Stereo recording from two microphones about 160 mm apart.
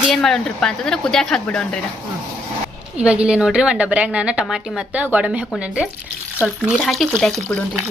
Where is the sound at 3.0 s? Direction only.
5° right (ahead or behind).